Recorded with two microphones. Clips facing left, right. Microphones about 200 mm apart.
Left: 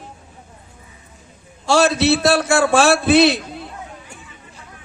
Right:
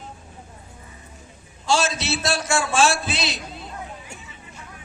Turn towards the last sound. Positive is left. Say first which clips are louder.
# left 15 dB
turn(degrees=60)  # may be behind; listen again after turning